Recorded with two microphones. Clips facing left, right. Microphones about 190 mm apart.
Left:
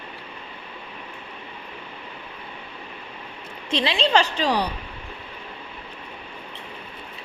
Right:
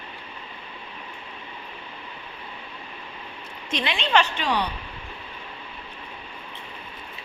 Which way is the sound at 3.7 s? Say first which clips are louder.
Left 3 dB; 30° left (ahead or behind).